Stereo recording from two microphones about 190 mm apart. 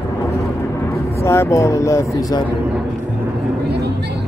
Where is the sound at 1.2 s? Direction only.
15° left (ahead or behind).